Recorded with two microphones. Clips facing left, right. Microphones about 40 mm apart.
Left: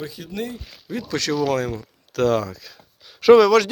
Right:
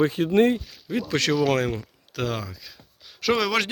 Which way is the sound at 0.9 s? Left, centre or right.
Right.